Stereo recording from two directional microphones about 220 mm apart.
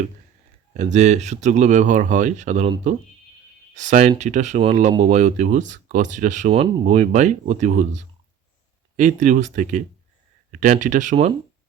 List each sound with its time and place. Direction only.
0.7 s speech: 30° right (ahead or behind)
9.0 s speech: 35° right (ahead or behind)